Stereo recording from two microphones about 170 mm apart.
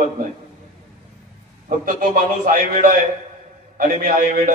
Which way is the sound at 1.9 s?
55° right (ahead or behind).